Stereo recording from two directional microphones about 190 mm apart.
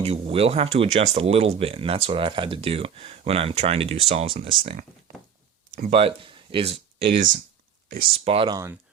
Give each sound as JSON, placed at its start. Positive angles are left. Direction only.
{"t": 0.0, "sound": "speech", "side_deg": -30}
{"t": 5.9, "sound": "speech", "side_deg": -30}
{"t": 7.9, "sound": "speech", "side_deg": -45}
{"t": 8.1, "sound": "speech", "side_deg": -30}
{"t": 8.5, "sound": "speech", "side_deg": -15}